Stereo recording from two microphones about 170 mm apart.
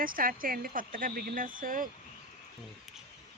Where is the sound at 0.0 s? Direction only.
55° right (ahead or behind).